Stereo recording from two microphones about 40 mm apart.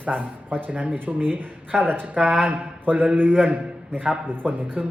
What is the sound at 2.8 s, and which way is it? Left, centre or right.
Mantra, right.